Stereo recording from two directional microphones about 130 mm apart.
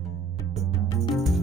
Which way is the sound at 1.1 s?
Centre (ahead or behind).